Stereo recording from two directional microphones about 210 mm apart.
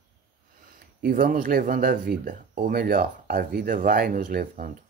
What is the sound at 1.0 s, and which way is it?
Speech, 40° right (ahead or behind).